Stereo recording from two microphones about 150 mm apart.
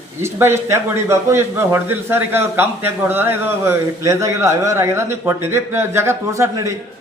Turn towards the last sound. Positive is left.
turn(degrees=-20)  # may be behind; listen again after turning